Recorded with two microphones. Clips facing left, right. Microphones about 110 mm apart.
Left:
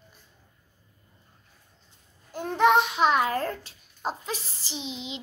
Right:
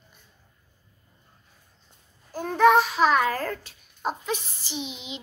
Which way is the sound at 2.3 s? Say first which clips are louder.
Right 2 dB; 20° left (ahead or behind).